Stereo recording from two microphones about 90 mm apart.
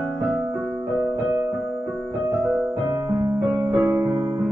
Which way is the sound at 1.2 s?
20° right (ahead or behind).